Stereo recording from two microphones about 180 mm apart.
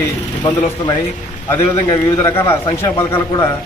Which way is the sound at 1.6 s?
20° left (ahead or behind).